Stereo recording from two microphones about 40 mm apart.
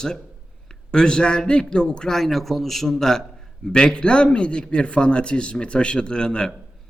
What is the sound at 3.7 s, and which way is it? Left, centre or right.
A man's voice, left.